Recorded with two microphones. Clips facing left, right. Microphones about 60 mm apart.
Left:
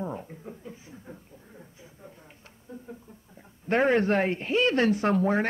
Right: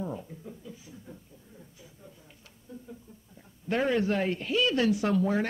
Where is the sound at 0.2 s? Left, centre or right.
Left.